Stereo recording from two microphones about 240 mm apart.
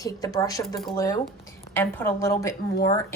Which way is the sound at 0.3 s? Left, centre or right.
Centre.